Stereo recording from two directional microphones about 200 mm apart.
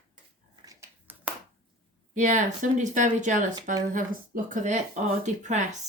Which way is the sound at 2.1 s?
40° right (ahead or behind).